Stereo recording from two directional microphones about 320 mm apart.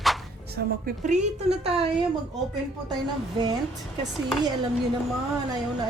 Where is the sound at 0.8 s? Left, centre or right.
Right.